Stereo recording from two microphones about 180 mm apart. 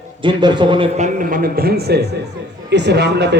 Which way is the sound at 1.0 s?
50° right (ahead or behind).